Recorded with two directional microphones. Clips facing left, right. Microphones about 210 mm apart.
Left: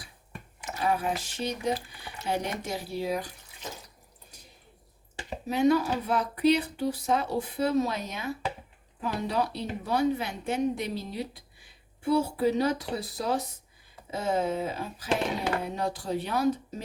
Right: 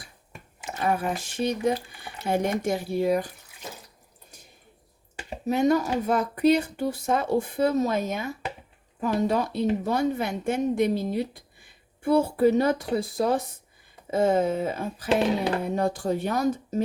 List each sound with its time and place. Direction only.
0.9 s speech: 50° right (ahead or behind)
5.5 s speech: 45° right (ahead or behind)